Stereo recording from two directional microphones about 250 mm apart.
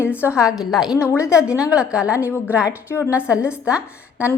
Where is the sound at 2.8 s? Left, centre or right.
Centre.